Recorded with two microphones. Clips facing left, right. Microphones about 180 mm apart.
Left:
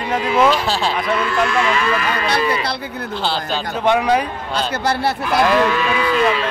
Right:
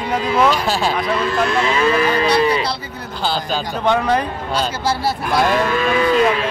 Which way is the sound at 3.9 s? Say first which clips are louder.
Left 1 dB; 10° left (ahead or behind).